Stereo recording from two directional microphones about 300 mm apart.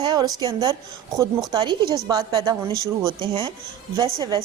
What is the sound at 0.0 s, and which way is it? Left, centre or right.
A woman's voice, centre.